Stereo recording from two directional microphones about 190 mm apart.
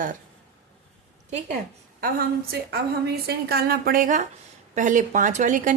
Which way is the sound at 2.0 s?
55° right (ahead or behind).